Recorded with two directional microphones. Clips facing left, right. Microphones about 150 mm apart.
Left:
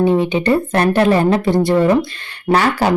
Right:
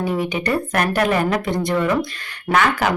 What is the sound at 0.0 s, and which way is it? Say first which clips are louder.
A woman's voice: left 7 dB; 25° left (ahead or behind).